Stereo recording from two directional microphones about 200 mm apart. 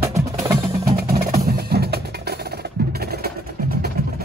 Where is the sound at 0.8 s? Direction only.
50° right (ahead or behind).